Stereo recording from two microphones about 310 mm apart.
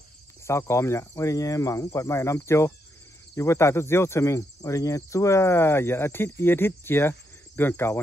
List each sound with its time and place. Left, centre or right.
0.5 s speech: centre